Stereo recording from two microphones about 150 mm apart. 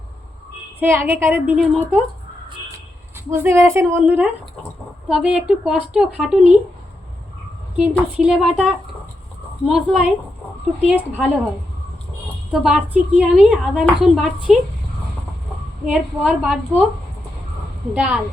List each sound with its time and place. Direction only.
0.8 s a woman's voice: 15° right (ahead or behind)
1.5 s a woman's voice: centre (ahead or behind)
3.3 s a woman's voice: 20° right (ahead or behind)
7.8 s a woman's voice: 10° right (ahead or behind)
12.5 s a woman's voice: centre (ahead or behind)
15.9 s a woman's voice: 5° right (ahead or behind)
17.9 s a woman's voice: 5° right (ahead or behind)